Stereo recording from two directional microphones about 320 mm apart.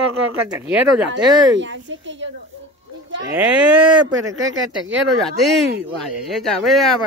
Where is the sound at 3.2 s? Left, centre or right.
Centre.